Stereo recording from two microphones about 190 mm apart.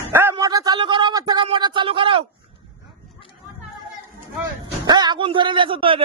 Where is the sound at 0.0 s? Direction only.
10° right (ahead or behind); by 2.2 s 25° right (ahead or behind).